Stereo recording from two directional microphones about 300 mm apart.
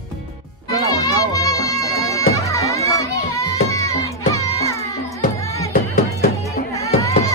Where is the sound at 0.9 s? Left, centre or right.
Centre.